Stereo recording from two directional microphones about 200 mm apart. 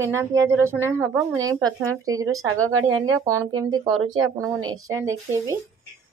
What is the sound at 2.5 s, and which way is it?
Speech, 90° right.